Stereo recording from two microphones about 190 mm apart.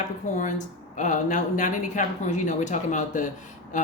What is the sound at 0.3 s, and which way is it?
Speech, 40° left (ahead or behind).